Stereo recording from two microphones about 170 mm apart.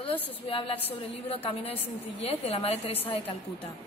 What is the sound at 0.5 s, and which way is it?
Speech, 30° left (ahead or behind).